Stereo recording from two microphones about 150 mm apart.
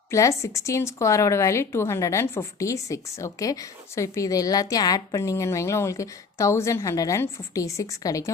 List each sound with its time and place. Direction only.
0.1 s speech: 20° left (ahead or behind)